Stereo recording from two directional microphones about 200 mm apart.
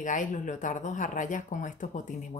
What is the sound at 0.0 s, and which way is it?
Speech, 40° left (ahead or behind).